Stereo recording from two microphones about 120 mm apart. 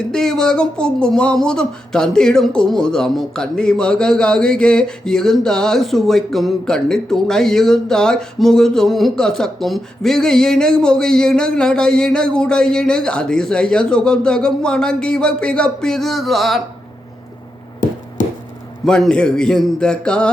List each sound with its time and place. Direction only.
0.1 s speech: 5° left (ahead or behind)
18.9 s a man's voice: 5° left (ahead or behind)